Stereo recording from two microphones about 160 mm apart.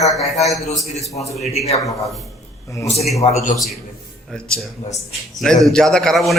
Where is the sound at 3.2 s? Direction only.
40° left (ahead or behind).